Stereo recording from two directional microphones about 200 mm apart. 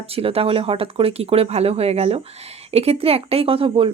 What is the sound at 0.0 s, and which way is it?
Speech, 30° right (ahead or behind).